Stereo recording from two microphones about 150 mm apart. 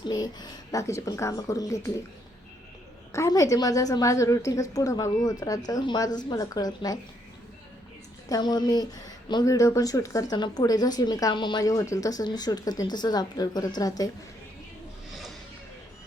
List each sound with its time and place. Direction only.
0.0 s speech: 25° left (ahead or behind)
3.1 s speech: 20° left (ahead or behind)
8.3 s speech: 30° left (ahead or behind)